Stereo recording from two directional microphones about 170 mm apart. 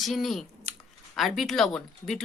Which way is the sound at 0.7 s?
40° right (ahead or behind).